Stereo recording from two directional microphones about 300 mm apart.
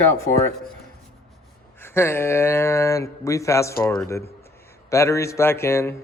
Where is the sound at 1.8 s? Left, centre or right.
Centre.